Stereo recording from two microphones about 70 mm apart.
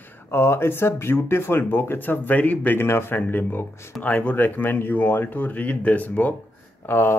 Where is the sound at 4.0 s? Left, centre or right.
Left.